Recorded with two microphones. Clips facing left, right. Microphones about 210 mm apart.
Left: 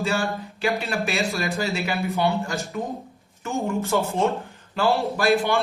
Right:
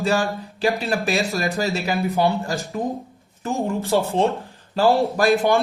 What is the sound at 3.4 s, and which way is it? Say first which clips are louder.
Speech: right 2 dB; 30° right (ahead or behind).